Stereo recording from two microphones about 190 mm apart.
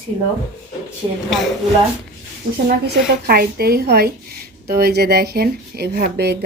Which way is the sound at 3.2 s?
55° right (ahead or behind).